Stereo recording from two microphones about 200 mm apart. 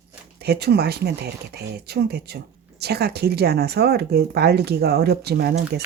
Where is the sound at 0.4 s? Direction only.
55° right (ahead or behind).